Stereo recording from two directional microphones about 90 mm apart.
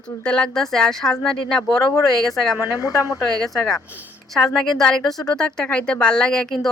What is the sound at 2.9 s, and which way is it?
Speech, 40° left (ahead or behind).